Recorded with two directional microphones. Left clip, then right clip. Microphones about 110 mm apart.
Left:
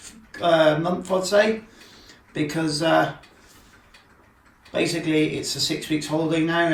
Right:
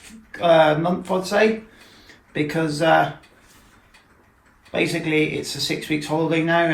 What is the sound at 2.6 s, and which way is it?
Speech, 25° left (ahead or behind).